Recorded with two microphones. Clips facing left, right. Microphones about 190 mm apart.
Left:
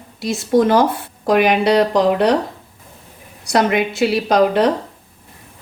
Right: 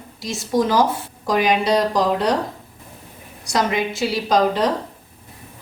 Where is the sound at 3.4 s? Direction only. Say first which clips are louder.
Left 5 dB; 60° left (ahead or behind).